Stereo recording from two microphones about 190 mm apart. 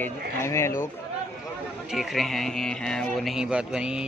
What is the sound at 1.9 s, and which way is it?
A man's voice, centre (ahead or behind).